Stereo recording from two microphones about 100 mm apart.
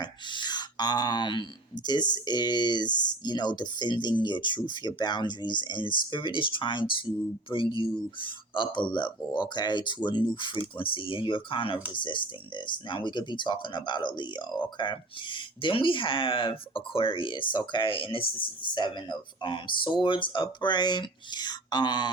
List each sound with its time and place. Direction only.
0.0 s speech: 50° left (ahead or behind)